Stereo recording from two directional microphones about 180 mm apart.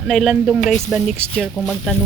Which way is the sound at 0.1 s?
Centre (ahead or behind).